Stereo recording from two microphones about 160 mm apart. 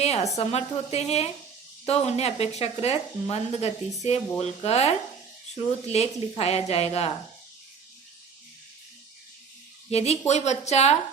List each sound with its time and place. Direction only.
0.0 s a sound: 40° left (ahead or behind)
0.3 s speech: 40° left (ahead or behind)
9.9 s speech: 40° left (ahead or behind)